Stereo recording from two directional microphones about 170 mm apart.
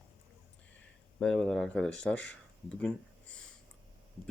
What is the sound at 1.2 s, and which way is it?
Speech, 5° left (ahead or behind).